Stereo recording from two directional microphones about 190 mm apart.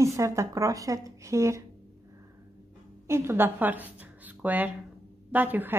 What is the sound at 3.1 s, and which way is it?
A woman's voice, 15° right (ahead or behind).